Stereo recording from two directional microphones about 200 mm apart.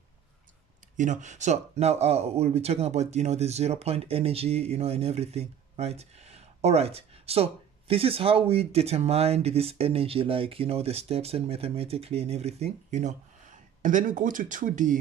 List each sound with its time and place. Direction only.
0.9 s speech: 40° right (ahead or behind)